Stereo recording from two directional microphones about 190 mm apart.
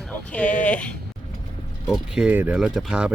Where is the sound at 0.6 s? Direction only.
5° left (ahead or behind).